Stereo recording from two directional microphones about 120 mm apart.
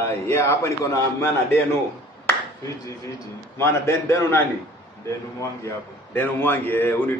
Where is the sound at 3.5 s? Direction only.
20° left (ahead or behind).